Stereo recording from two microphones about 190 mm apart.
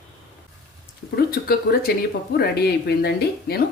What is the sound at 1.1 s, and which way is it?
Speech, 55° left (ahead or behind).